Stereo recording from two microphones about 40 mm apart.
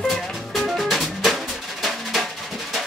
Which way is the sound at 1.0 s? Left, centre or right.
Centre.